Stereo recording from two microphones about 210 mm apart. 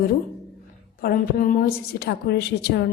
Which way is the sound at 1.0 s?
45° left (ahead or behind).